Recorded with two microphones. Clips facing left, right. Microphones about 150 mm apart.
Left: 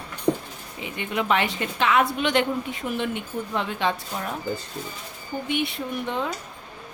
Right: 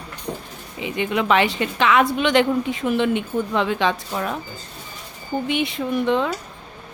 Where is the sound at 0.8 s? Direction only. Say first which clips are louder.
Right 5 dB; 90° right.